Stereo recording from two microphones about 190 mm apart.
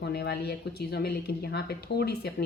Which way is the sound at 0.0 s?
60° left (ahead or behind).